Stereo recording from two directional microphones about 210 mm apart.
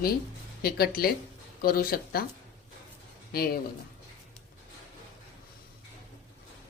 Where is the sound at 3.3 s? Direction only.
45° left (ahead or behind).